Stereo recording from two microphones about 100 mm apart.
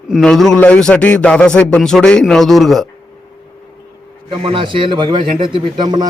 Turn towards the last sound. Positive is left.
turn(degrees=-45)  # may be behind; listen again after turning